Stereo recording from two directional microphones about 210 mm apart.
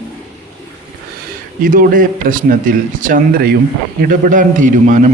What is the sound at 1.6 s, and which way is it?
Speech, 40° right (ahead or behind).